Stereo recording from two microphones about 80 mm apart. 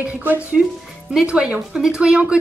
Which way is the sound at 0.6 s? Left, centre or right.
Centre.